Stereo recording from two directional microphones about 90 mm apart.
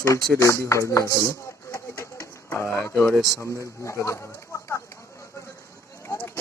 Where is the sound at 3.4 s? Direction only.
30° left (ahead or behind).